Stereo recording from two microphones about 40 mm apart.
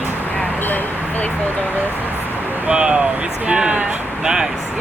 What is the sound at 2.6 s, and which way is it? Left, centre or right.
Speech, right.